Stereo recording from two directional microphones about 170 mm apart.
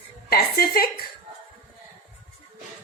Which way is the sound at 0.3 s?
65° left (ahead or behind).